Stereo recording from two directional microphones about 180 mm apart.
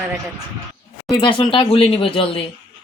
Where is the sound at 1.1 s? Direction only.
25° left (ahead or behind).